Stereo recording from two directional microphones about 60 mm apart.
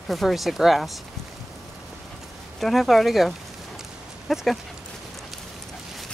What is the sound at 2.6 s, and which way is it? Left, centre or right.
Speech, centre.